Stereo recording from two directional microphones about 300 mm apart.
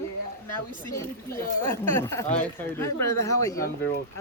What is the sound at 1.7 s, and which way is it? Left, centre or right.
Speech, centre.